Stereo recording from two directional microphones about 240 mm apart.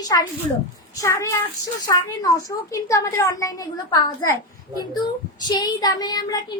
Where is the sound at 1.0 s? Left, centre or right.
Centre.